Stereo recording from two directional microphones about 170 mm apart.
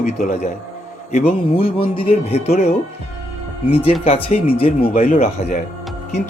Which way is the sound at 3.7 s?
35° left (ahead or behind).